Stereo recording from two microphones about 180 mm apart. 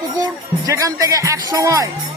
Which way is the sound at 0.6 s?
20° right (ahead or behind).